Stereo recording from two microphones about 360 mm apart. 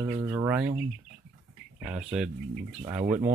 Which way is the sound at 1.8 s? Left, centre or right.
Centre.